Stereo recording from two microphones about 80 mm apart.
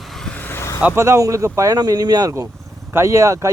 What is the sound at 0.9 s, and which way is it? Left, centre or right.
Speech, right.